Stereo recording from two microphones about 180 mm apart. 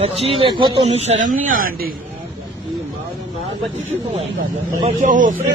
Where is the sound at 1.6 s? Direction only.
55° right (ahead or behind).